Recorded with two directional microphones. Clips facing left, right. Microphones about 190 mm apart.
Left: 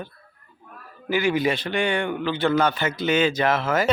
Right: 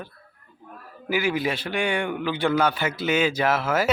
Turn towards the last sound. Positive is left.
turn(degrees=-5)  # may be behind; listen again after turning